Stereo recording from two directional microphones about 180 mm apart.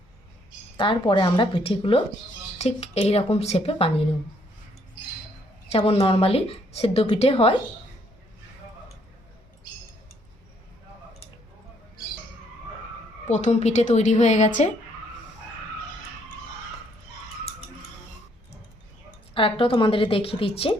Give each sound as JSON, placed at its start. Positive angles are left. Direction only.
{"t": 0.8, "sound": "a woman's voice", "side_deg": 30}
{"t": 5.7, "sound": "a woman's voice", "side_deg": 35}
{"t": 13.2, "sound": "a woman's voice", "side_deg": 40}
{"t": 19.3, "sound": "a woman's voice", "side_deg": 30}